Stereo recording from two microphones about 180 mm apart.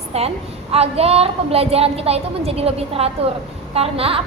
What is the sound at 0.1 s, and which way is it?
Speech, 35° right (ahead or behind).